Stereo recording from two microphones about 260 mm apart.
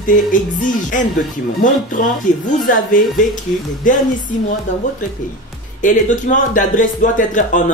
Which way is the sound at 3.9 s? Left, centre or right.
Left.